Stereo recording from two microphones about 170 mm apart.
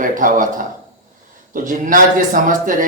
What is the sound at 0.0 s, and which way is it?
A man's voice, 50° right (ahead or behind).